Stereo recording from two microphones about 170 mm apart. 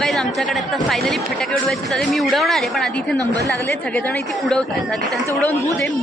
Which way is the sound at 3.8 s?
10° left (ahead or behind).